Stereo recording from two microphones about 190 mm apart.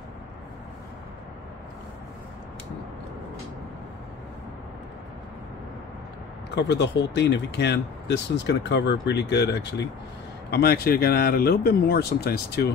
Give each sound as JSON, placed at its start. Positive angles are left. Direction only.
{"t": 6.5, "sound": "speech", "side_deg": 65}
{"t": 10.5, "sound": "speech", "side_deg": 55}